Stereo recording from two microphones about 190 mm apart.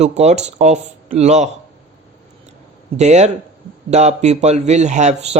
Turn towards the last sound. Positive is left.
turn(degrees=-35)  # may be behind; listen again after turning